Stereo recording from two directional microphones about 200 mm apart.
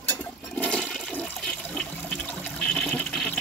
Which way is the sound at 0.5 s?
5° left (ahead or behind).